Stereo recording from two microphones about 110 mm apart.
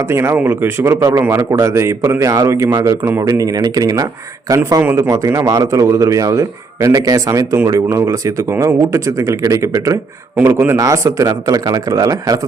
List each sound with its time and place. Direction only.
0.1 s speech: 25° right (ahead or behind)